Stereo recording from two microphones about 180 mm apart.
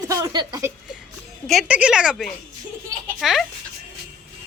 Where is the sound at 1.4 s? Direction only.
5° right (ahead or behind).